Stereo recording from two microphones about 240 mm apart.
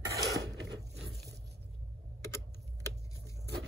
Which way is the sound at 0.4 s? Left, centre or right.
Right.